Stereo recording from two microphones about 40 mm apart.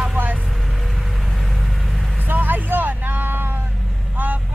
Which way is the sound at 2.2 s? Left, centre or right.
Right.